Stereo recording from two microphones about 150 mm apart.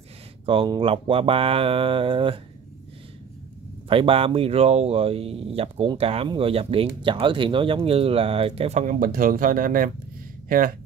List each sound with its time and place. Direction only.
0.5 s speech: 35° right (ahead or behind)
3.9 s speech: 35° right (ahead or behind); by 9.8 s 70° right (ahead or behind)